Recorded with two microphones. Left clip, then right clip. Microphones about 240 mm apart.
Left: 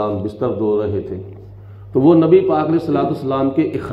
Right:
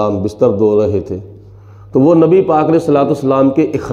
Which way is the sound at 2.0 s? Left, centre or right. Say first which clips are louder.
Right 3 dB; right.